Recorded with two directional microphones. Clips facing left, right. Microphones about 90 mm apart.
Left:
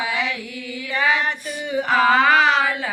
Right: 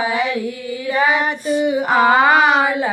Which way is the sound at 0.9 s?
15° right (ahead or behind).